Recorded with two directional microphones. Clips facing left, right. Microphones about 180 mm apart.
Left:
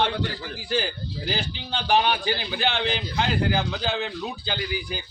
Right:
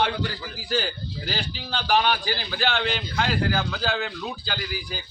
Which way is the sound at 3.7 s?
Centre (ahead or behind).